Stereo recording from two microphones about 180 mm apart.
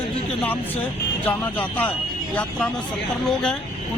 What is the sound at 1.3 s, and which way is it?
Speech, 10° left (ahead or behind).